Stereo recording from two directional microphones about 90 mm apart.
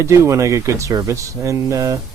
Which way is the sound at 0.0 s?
35° right (ahead or behind).